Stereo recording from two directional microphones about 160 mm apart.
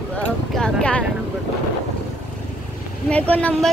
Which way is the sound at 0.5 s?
5° left (ahead or behind).